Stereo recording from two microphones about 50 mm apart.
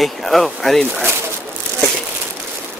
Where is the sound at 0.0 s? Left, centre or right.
Centre.